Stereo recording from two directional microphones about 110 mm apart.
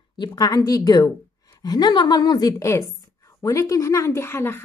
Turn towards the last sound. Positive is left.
turn(degrees=20)  # may be behind; listen again after turning